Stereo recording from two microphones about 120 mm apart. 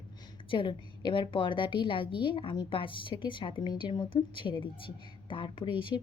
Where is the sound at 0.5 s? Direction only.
45° left (ahead or behind).